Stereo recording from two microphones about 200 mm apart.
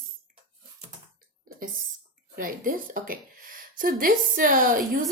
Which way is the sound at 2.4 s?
45° right (ahead or behind).